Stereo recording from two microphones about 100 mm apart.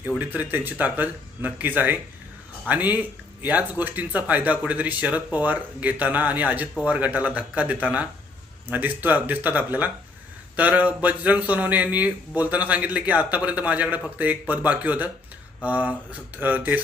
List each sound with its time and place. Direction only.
0.2 s speech: 15° right (ahead or behind)